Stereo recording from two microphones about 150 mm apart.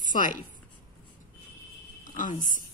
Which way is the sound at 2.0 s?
60° left (ahead or behind).